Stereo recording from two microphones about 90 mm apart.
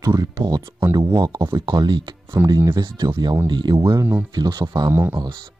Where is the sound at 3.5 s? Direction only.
60° right (ahead or behind).